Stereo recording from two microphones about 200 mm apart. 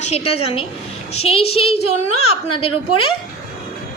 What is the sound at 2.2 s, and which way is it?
Speech, 90° left.